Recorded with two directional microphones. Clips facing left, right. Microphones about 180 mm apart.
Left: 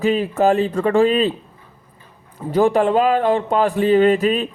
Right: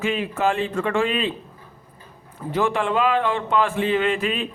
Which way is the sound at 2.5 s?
40° left (ahead or behind).